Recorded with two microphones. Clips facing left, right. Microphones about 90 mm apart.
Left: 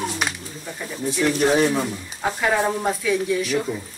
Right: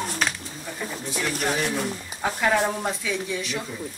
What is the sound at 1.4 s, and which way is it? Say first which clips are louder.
Speech: left 8 dB; 45° left (ahead or behind).